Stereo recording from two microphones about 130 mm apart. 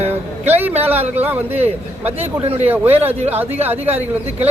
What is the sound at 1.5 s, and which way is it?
A man's voice, 55° right (ahead or behind).